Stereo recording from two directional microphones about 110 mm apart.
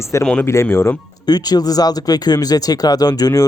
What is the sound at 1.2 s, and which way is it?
Speech, 35° left (ahead or behind).